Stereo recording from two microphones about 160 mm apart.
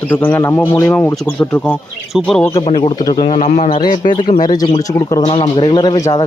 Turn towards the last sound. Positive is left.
turn(degrees=25)  # may be behind; listen again after turning